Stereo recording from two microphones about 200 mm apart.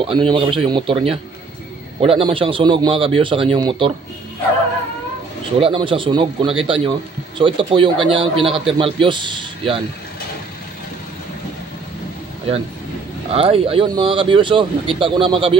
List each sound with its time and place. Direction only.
0.0 s a man's voice: 25° right (ahead or behind)
5.6 s a man's voice: 25° right (ahead or behind)
13.3 s a man's voice: 30° right (ahead or behind)